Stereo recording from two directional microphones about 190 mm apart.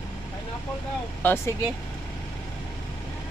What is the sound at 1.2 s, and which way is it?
Speech, 10° left (ahead or behind).